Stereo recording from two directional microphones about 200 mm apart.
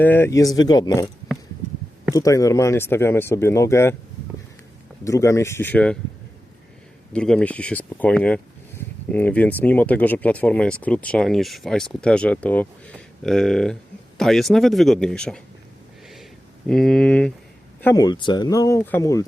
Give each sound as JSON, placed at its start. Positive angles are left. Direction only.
{"t": 0.0, "sound": "speech", "side_deg": 10}
{"t": 2.1, "sound": "speech", "side_deg": 15}
{"t": 5.0, "sound": "speech", "side_deg": 15}
{"t": 7.1, "sound": "speech", "side_deg": 5}
{"t": 16.6, "sound": "speech", "side_deg": 5}
{"t": 17.8, "sound": "speech", "side_deg": 20}